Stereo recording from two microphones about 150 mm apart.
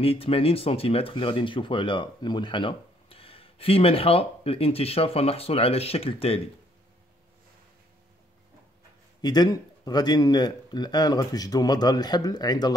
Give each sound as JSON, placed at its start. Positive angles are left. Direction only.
{"t": 0.0, "sound": "speech", "side_deg": 40}
{"t": 9.2, "sound": "speech", "side_deg": 25}